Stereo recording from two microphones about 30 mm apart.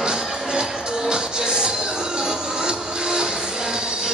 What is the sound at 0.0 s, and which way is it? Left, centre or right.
Music, right.